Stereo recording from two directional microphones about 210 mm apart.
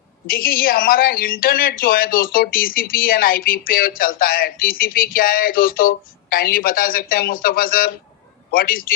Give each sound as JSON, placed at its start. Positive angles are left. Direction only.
{"t": 0.3, "sound": "speech", "side_deg": 45}